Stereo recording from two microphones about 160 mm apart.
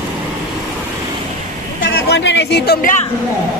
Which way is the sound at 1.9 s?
90° left.